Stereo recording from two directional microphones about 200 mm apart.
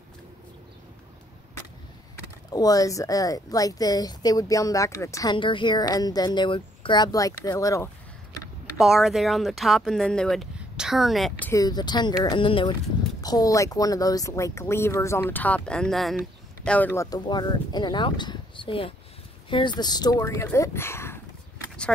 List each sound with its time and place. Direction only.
2.5 s speech: 20° left (ahead or behind)
8.7 s speech: centre (ahead or behind)
11.6 s speech: 20° left (ahead or behind)